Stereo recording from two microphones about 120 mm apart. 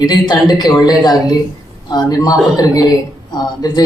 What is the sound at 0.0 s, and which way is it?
A man's voice, 35° left (ahead or behind).